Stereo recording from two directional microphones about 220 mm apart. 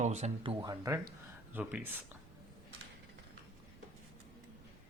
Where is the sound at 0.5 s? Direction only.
15° right (ahead or behind).